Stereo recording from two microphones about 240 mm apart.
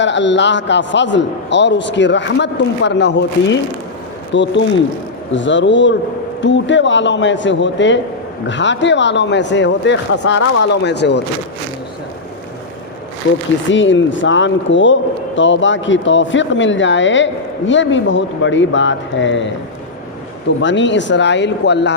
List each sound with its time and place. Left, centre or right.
0.0 s a man's voice: left
13.7 s a man's voice: left
20.6 s a man's voice: left